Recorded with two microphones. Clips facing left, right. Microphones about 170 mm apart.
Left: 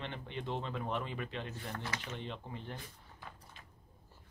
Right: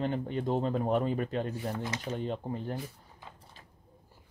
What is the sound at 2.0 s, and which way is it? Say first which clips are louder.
Speech: right 9 dB; 40° right (ahead or behind).